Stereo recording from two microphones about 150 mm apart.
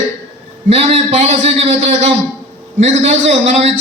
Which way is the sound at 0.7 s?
45° right (ahead or behind).